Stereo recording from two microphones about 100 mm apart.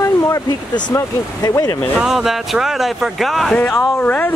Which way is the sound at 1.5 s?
35° left (ahead or behind).